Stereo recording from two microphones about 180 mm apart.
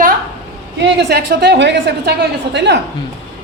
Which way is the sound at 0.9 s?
65° right (ahead or behind).